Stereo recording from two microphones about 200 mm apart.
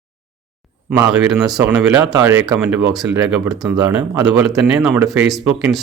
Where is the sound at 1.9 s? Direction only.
20° right (ahead or behind).